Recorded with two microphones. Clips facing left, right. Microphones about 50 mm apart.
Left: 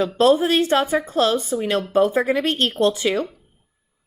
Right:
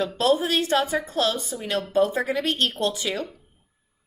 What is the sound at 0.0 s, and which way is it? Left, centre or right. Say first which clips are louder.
Speech: left 5 dB; left.